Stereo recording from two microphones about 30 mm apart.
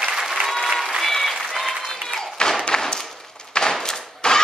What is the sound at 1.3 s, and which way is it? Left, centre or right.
Applause, centre.